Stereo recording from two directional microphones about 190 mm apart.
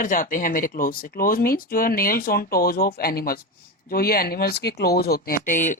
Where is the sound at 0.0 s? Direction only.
45° left (ahead or behind).